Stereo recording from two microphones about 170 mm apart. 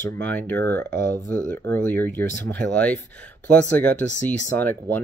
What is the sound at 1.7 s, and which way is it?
Speech, 10° left (ahead or behind).